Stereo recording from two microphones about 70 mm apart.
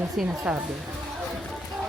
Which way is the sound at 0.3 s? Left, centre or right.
Right.